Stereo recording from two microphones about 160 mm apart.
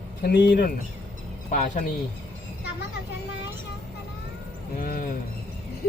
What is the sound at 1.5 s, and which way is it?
Speech, 55° left (ahead or behind).